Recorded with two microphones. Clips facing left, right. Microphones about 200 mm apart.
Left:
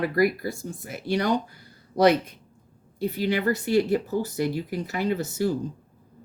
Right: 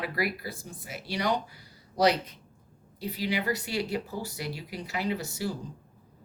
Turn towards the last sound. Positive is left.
turn(degrees=50)  # may be behind; listen again after turning